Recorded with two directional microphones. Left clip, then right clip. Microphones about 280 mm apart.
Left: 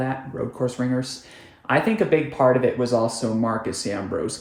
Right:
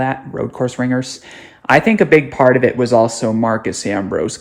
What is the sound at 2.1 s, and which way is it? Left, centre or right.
Speech, right.